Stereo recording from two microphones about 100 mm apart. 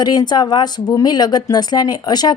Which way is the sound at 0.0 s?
45° left (ahead or behind).